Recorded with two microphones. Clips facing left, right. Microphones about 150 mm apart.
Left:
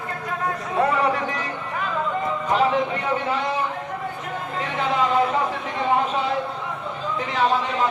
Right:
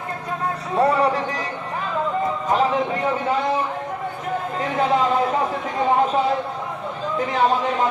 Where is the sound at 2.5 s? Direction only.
40° right (ahead or behind).